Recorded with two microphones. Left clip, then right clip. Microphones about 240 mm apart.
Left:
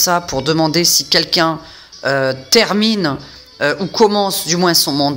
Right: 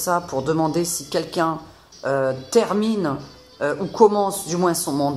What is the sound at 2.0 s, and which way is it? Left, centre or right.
Speech, left.